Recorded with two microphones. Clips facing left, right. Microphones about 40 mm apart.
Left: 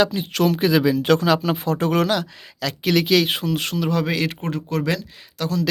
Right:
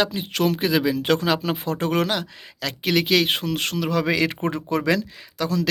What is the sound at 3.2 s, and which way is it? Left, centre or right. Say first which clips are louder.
Speech: left 1 dB; right.